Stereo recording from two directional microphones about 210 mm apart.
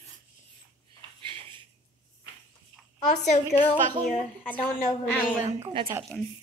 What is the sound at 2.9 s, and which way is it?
Speech, 30° left (ahead or behind).